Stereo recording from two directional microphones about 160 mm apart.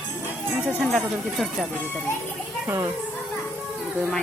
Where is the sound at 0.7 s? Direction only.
5° right (ahead or behind).